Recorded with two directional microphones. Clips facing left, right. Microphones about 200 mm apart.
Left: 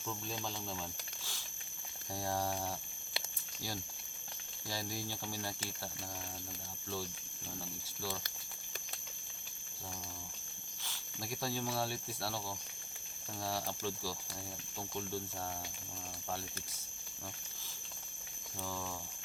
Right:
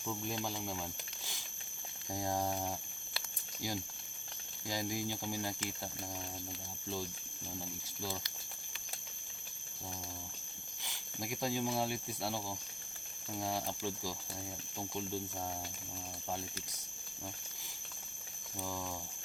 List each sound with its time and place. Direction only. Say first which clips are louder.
0.0 s speech: right 3 dB; 15° right (ahead or behind)
4.7 s speech: right 4 dB; 15° right (ahead or behind)
7.6 s speech: left 1 dB; 15° right (ahead or behind)
10.8 s speech: right 2 dB; 15° right (ahead or behind)
18.6 s speech: right 1 dB; 15° right (ahead or behind)